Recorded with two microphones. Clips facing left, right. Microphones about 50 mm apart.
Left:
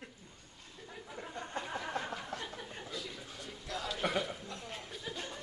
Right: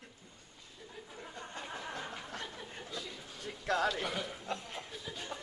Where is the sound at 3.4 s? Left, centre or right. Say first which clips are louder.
Right 10 dB; right.